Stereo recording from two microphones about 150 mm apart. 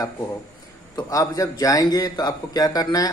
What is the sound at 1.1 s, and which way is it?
A man's voice, 25° left (ahead or behind).